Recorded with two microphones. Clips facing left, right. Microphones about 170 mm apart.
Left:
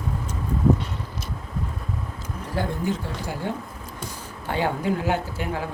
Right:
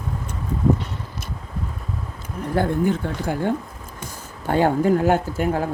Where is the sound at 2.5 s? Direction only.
55° right (ahead or behind).